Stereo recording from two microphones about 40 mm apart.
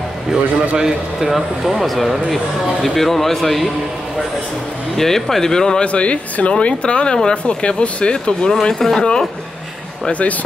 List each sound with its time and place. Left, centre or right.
0.3 s speech: centre
4.9 s speech: centre
5.9 s speech: left
8.6 s speech: centre